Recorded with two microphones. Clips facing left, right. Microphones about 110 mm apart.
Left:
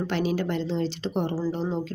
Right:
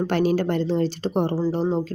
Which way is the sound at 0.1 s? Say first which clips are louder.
Right 5 dB; 45° right (ahead or behind).